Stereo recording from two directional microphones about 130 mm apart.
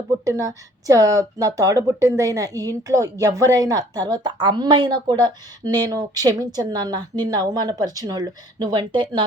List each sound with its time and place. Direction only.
0.3 s a woman's voice: 25° right (ahead or behind)